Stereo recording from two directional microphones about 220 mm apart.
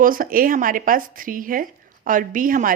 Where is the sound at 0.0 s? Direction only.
40° right (ahead or behind).